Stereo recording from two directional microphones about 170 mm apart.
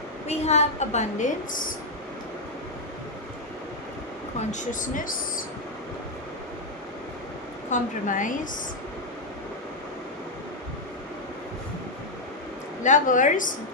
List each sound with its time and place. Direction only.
0.3 s a woman's voice: 40° left (ahead or behind)
4.4 s speech: 50° left (ahead or behind)
7.7 s speech: 50° left (ahead or behind)
12.8 s speech: 50° left (ahead or behind)